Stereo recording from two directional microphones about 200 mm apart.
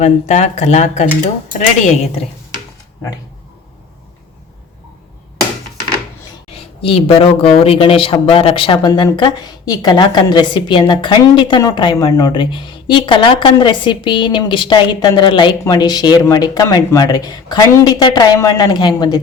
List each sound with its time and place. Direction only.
0.0 s speech: 35° left (ahead or behind)
6.8 s speech: 25° left (ahead or behind)